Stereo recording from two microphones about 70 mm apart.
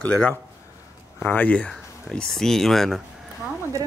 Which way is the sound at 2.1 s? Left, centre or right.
Centre.